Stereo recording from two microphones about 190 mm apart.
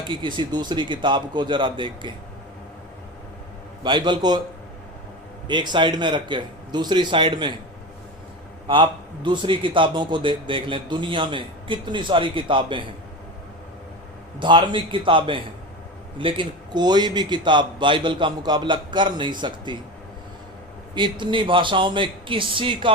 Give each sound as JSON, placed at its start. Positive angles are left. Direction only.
{"t": 0.1, "sound": "a man's voice", "side_deg": -25}
{"t": 3.8, "sound": "a man's voice", "side_deg": -25}
{"t": 5.5, "sound": "a man's voice", "side_deg": -25}
{"t": 8.6, "sound": "a man's voice", "side_deg": -25}
{"t": 14.3, "sound": "a man's voice", "side_deg": -25}
{"t": 20.9, "sound": "a man's voice", "side_deg": -25}